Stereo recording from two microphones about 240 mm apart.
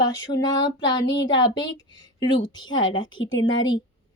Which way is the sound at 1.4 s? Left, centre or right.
Centre.